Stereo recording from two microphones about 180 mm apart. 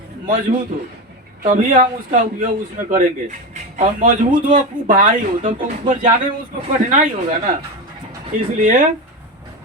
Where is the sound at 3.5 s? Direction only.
45° right (ahead or behind).